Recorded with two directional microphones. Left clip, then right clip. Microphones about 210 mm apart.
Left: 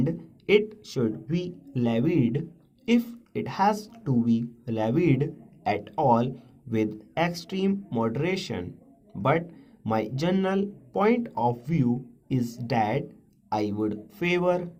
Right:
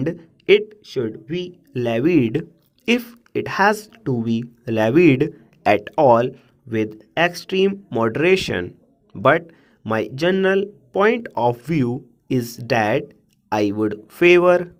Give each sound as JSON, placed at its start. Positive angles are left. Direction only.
{"t": 0.0, "sound": "speech", "side_deg": -50}